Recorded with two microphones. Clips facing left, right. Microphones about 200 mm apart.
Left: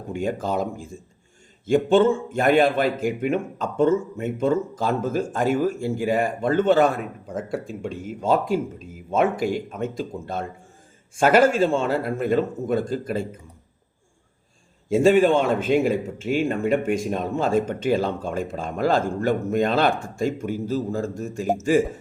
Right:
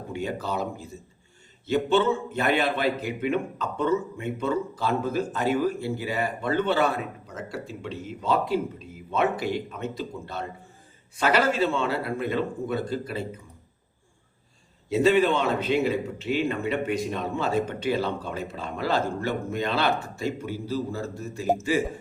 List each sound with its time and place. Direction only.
0.1 s a man's voice: 50° left (ahead or behind)
14.8 s a man's voice: 45° left (ahead or behind)